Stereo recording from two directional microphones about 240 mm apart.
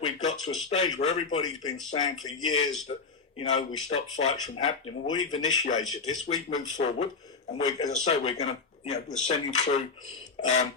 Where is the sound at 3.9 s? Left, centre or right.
Left.